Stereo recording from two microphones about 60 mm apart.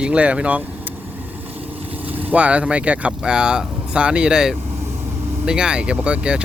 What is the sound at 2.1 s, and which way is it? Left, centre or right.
Speech, right.